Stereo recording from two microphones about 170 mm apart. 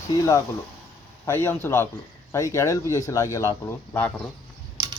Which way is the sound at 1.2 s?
15° left (ahead or behind).